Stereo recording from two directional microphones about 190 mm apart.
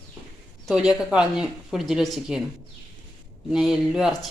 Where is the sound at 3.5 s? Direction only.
Centre (ahead or behind).